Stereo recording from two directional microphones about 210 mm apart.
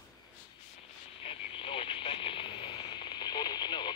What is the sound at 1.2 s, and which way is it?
Radio, 25° left (ahead or behind).